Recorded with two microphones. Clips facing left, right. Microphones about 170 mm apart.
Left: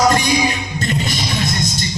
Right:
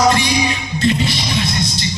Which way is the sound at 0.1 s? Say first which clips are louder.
Even; 45° left (ahead or behind).